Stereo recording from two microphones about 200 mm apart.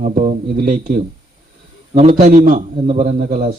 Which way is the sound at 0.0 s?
35° right (ahead or behind).